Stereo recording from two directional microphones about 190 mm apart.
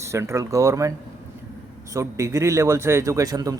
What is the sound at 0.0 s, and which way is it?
Speech, 15° right (ahead or behind).